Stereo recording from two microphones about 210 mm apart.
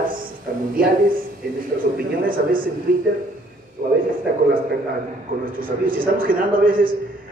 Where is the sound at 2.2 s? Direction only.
40° right (ahead or behind).